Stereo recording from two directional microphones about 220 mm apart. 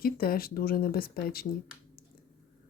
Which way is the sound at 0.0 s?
40° left (ahead or behind).